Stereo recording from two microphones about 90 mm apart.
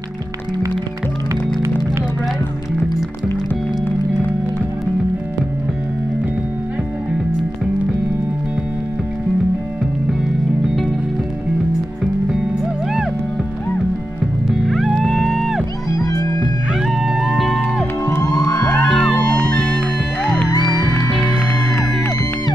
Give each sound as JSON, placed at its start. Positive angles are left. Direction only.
{"t": 14.7, "sound": "music", "side_deg": 0}
{"t": 16.0, "sound": "music", "side_deg": 45}
{"t": 16.8, "sound": "music", "side_deg": -5}
{"t": 18.0, "sound": "music", "side_deg": 30}
{"t": 18.9, "sound": "music", "side_deg": 10}